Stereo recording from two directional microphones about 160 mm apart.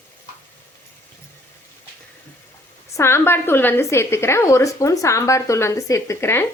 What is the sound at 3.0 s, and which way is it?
A woman's voice, 15° left (ahead or behind).